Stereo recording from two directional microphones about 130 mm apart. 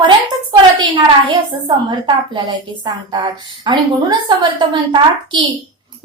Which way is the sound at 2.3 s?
35° right (ahead or behind).